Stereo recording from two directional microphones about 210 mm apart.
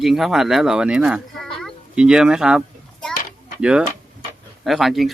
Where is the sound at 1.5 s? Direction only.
Centre (ahead or behind).